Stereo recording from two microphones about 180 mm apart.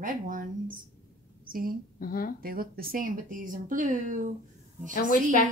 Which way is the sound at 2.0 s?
55° left (ahead or behind).